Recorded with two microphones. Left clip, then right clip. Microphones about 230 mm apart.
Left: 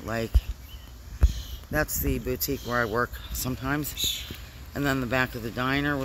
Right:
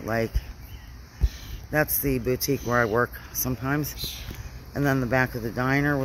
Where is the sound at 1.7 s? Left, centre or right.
Centre.